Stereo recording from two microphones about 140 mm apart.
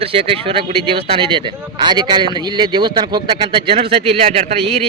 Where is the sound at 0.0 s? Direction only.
40° right (ahead or behind).